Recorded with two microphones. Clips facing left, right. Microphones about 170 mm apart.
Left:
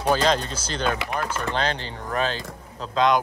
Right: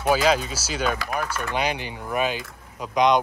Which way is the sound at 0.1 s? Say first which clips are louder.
Right 1 dB; 10° right (ahead or behind).